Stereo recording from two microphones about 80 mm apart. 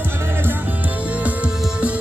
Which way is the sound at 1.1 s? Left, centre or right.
Centre.